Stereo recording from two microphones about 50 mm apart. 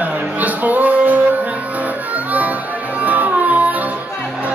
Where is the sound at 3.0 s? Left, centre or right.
Right.